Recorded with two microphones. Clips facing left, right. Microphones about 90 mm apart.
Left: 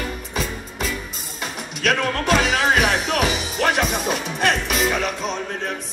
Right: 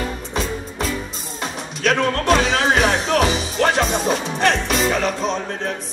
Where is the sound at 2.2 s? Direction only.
35° right (ahead or behind).